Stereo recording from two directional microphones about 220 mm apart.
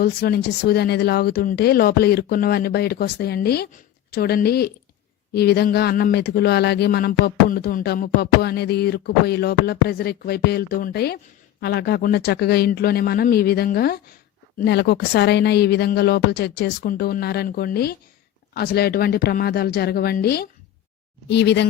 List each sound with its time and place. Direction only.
0.0 s speech: 45° left (ahead or behind)